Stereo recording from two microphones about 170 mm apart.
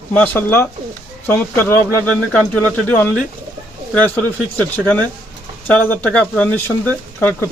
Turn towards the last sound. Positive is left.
turn(degrees=10)  # may be behind; listen again after turning